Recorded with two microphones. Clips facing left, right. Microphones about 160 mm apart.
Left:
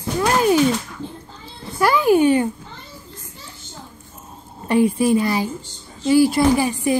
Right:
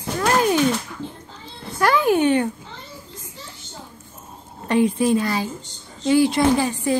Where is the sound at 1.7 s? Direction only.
5° left (ahead or behind).